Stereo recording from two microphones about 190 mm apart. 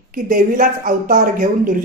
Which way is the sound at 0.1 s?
45° right (ahead or behind).